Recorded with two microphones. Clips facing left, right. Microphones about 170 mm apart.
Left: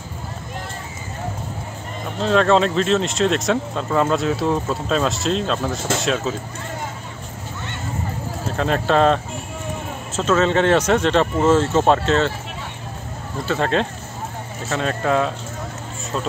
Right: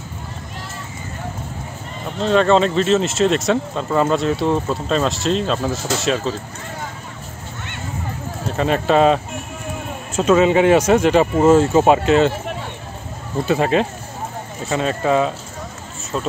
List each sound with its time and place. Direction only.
2.1 s speech: centre (ahead or behind)
8.5 s speech: 5° right (ahead or behind)
13.5 s speech: 5° right (ahead or behind)